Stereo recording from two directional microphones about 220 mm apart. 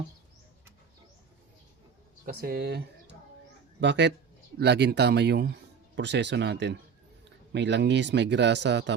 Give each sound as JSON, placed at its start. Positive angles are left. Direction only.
{"t": 2.2, "sound": "speech", "side_deg": -40}